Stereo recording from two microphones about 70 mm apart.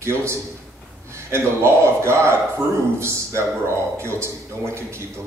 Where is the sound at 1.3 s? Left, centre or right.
Right.